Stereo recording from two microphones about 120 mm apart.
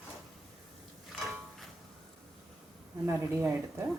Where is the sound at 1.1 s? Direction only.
5° left (ahead or behind).